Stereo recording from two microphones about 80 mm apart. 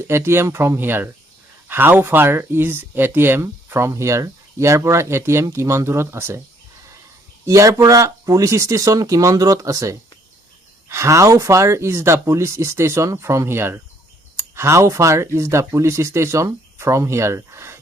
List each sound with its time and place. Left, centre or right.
0.0 s speech: right
7.4 s speech: right